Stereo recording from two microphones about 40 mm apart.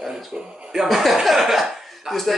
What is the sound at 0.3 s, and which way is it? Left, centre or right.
Speech, right.